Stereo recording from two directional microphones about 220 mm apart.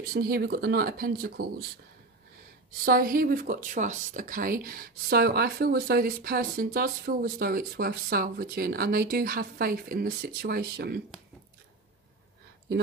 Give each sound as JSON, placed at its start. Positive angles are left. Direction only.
{"t": 0.1, "sound": "speech", "side_deg": -45}
{"t": 2.8, "sound": "speech", "side_deg": -40}